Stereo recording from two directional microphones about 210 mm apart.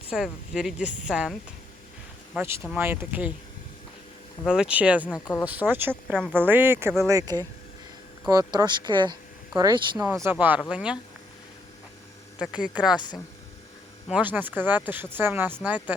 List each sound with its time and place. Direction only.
0.1 s a woman's voice: centre (ahead or behind)
4.4 s a woman's voice: 5° right (ahead or behind)
5.0 s speech: 5° left (ahead or behind)
5.5 s speech: 5° right (ahead or behind)
6.1 s a woman's voice: 5° left (ahead or behind)
6.4 s speech: 10° right (ahead or behind)
10.1 s a woman's voice: 10° right (ahead or behind)
12.4 s a woman's voice: 5° right (ahead or behind)
13.0 s speech: 20° left (ahead or behind)
14.1 s speech: 10° right (ahead or behind)